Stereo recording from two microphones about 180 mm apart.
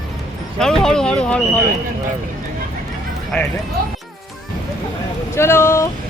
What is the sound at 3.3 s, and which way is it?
Speech, 5° left (ahead or behind).